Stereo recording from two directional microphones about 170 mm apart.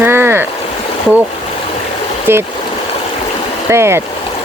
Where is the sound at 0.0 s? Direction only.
15° right (ahead or behind).